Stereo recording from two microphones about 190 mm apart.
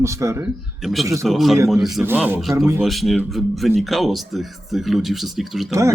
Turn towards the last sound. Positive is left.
turn(degrees=-15)  # may be behind; listen again after turning